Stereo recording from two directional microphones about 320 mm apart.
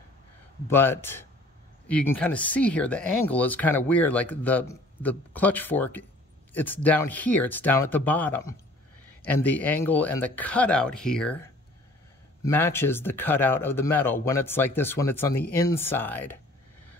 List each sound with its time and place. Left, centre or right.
0.7 s speech: centre
12.4 s speech: centre